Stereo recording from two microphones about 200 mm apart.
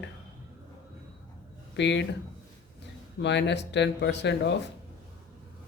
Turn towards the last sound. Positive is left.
turn(degrees=60)  # may be behind; listen again after turning